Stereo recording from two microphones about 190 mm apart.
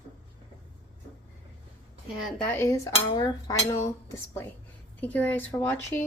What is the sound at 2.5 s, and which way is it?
Speech, 15° left (ahead or behind).